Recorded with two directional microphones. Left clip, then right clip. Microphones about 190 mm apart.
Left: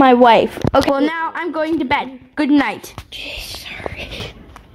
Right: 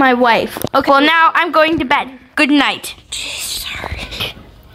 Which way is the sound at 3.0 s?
35° left (ahead or behind).